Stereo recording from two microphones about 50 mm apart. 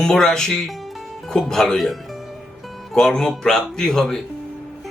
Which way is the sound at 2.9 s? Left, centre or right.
Centre.